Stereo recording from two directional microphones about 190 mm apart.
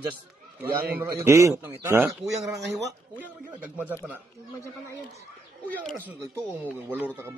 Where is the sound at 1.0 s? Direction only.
15° right (ahead or behind).